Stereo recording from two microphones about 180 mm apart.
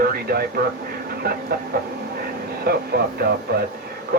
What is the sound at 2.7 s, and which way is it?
Speech, 60° right (ahead or behind).